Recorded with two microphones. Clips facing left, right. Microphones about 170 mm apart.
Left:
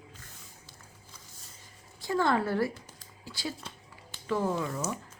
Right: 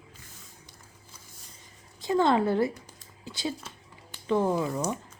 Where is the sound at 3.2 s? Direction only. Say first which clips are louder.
Right 4 dB; 20° right (ahead or behind).